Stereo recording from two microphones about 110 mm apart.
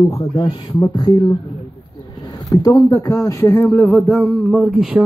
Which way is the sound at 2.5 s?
35° left (ahead or behind).